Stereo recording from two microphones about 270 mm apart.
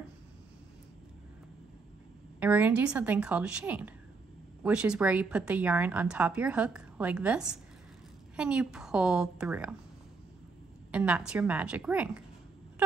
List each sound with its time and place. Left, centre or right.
2.4 s a woman's voice: centre
10.9 s a woman's voice: centre